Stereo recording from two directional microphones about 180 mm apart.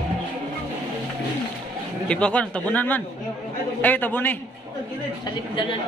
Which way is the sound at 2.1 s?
5° left (ahead or behind).